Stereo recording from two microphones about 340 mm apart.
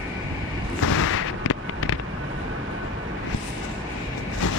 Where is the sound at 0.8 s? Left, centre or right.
Left.